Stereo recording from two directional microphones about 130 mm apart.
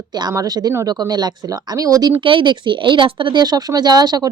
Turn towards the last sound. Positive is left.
turn(degrees=-30)  # may be behind; listen again after turning